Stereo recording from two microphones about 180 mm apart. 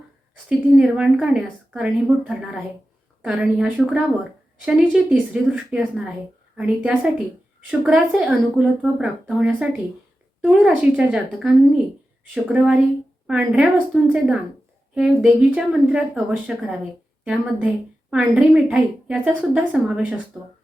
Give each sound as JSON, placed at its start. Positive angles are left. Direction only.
{"t": 0.4, "sound": "a woman's voice", "side_deg": -5}